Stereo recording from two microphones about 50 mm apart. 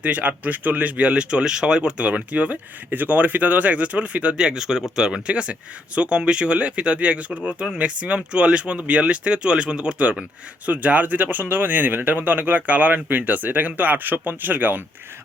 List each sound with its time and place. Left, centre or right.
0.0 s speech: right
4.4 s speech: centre
5.3 s speech: right